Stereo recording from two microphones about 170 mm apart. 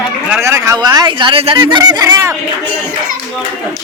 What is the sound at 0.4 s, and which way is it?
A man's voice, 15° right (ahead or behind).